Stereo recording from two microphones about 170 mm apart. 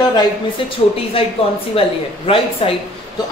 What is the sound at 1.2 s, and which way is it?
Speech, 35° left (ahead or behind).